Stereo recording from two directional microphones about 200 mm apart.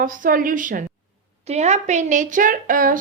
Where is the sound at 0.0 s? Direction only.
45° right (ahead or behind).